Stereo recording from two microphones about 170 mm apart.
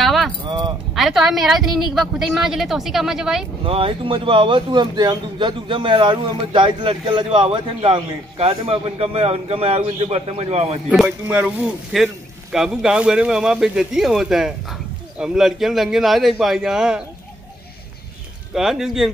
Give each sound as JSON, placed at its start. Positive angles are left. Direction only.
{"t": 0.0, "sound": "a sound", "side_deg": 0}
{"t": 0.5, "sound": "keys jangling", "side_deg": -25}
{"t": 0.9, "sound": "speech", "side_deg": 0}
{"t": 3.6, "sound": "speech", "side_deg": -30}
{"t": 10.9, "sound": "speech", "side_deg": -5}
{"t": 18.5, "sound": "speech", "side_deg": 0}